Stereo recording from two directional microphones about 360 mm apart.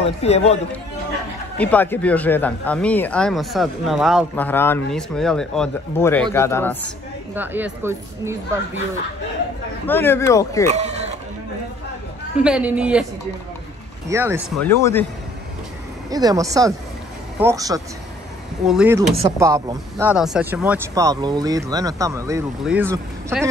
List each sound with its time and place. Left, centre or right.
0.0 s speech: centre
1.6 s speech: centre
7.3 s speech: centre
9.8 s speech: centre
10.7 s speech: centre
12.4 s speech: centre
14.0 s speech: centre
14.6 s speech: centre
16.1 s speech: centre